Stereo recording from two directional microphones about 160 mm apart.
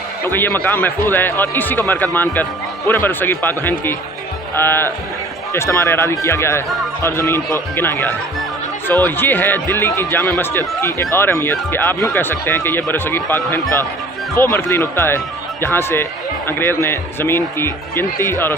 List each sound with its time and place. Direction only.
0.2 s speech: 15° left (ahead or behind)